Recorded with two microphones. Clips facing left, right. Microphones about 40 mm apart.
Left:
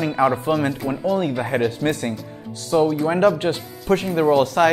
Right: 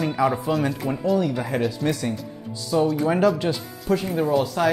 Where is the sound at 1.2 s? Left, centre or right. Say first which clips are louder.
Left 2 dB; left.